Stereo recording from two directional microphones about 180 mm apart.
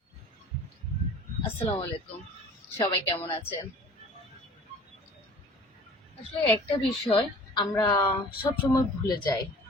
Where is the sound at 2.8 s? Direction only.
15° left (ahead or behind).